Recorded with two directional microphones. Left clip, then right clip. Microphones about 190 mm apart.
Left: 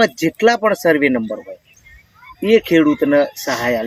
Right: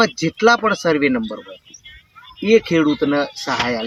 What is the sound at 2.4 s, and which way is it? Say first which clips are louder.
Speech: left 1 dB; 20° right (ahead or behind).